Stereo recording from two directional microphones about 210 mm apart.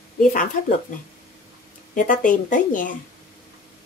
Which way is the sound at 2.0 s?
40° left (ahead or behind).